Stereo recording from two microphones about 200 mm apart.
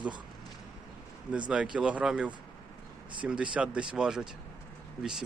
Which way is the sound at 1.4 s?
5° right (ahead or behind).